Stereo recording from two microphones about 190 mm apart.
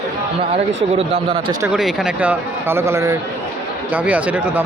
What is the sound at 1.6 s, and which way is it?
Speech, 5° right (ahead or behind).